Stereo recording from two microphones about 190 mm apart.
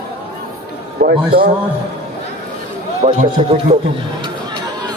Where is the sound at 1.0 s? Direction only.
50° right (ahead or behind).